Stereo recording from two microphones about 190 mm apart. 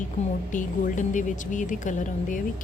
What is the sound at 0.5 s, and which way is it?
A woman's voice, 40° left (ahead or behind).